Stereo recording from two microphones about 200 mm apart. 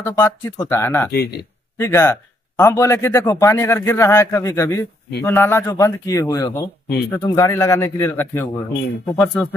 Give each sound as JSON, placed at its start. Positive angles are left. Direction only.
{"t": 0.0, "sound": "a man's voice", "side_deg": 15}
{"t": 1.1, "sound": "speech", "side_deg": 50}
{"t": 1.8, "sound": "a man's voice", "side_deg": 15}